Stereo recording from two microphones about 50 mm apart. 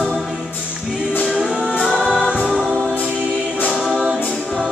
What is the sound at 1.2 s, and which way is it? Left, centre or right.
Music, centre.